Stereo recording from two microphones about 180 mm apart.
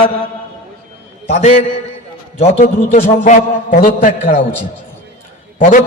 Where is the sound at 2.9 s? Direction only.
50° left (ahead or behind).